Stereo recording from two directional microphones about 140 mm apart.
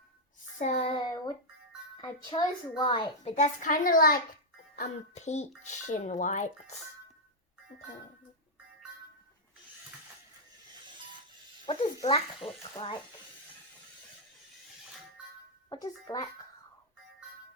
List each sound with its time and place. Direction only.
0.6 s a sound: 45° left (ahead or behind)
2.0 s a woman's voice: 35° left (ahead or behind)
3.3 s a woman's voice: 65° left (ahead or behind); by 4.2 s 85° left
5.1 s a child's voice: 55° left (ahead or behind)
5.8 s speech: 65° left (ahead or behind)
11.6 s a woman's voice: 35° left (ahead or behind)
15.7 s speech: 25° left (ahead or behind)